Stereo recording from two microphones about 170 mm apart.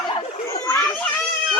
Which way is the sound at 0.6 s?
10° left (ahead or behind).